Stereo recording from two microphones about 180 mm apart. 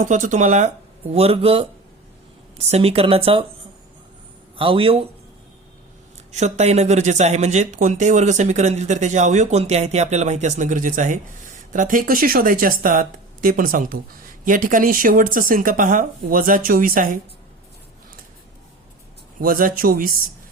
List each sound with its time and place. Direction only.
0.0 s speech: 45° right (ahead or behind)
2.6 s speech: 35° right (ahead or behind)
4.5 s speech: 30° right (ahead or behind)
6.3 s speech: 40° right (ahead or behind)
19.4 s speech: 50° right (ahead or behind)